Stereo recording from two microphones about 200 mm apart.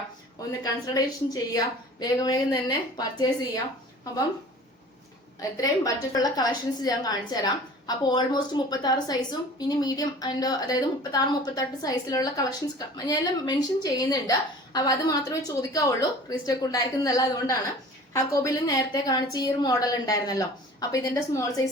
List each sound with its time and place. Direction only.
0.6 s a woman's voice: 20° left (ahead or behind)
5.4 s a woman's voice: 15° left (ahead or behind)